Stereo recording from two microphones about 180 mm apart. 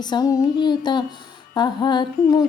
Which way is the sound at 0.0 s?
20° left (ahead or behind).